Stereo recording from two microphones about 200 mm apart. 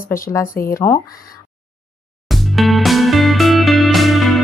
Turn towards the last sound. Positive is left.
turn(degrees=0)  # may be behind; listen again after turning